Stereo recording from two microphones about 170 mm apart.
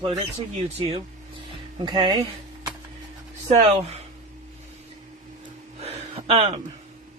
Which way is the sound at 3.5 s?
40° right (ahead or behind).